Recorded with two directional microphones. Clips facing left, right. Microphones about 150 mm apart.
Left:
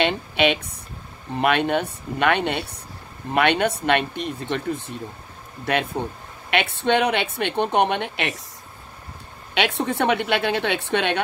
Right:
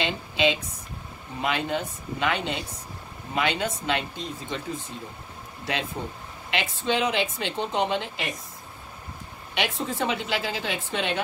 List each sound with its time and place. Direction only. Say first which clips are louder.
0.0 s speech: left 4 dB; 65° left (ahead or behind)
9.5 s speech: left 6 dB; 65° left (ahead or behind)